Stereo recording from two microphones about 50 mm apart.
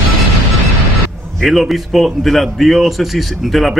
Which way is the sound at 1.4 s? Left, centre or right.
Centre.